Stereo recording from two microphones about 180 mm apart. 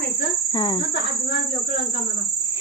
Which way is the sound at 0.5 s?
30° left (ahead or behind).